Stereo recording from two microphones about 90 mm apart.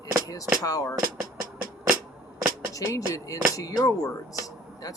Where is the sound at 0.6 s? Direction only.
40° left (ahead or behind).